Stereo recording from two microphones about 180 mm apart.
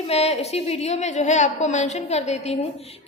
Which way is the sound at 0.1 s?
35° left (ahead or behind).